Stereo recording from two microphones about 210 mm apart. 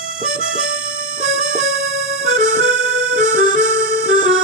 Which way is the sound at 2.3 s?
40° right (ahead or behind).